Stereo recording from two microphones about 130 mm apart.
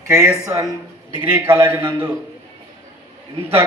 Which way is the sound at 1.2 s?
15° right (ahead or behind).